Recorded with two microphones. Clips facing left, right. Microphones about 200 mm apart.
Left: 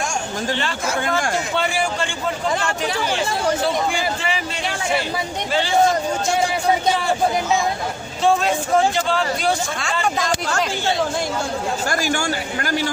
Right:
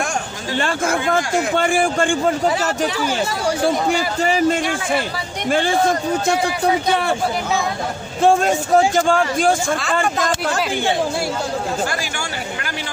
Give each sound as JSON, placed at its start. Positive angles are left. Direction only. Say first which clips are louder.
{"t": 0.6, "sound": "a man's voice", "louder": "right 4 dB", "side_deg": -50}
{"t": 3.6, "sound": "a man's voice", "louder": "right 3 dB", "side_deg": -40}
{"t": 8.2, "sound": "a man's voice", "louder": "right 3 dB", "side_deg": -50}